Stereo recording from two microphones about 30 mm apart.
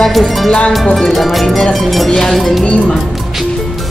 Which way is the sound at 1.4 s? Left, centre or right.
Centre.